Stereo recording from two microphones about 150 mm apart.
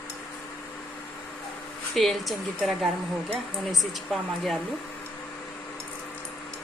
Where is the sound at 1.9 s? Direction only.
Centre (ahead or behind).